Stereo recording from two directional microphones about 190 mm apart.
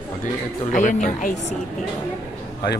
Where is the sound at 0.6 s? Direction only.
40° left (ahead or behind).